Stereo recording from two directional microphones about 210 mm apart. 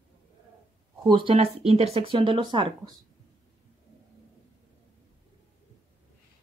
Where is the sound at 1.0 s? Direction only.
25° right (ahead or behind).